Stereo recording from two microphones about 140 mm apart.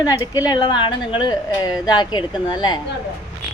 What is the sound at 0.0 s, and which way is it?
A woman's voice, 25° left (ahead or behind).